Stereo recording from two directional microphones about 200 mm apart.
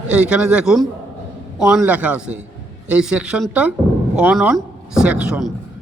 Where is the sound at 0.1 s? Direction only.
5° right (ahead or behind).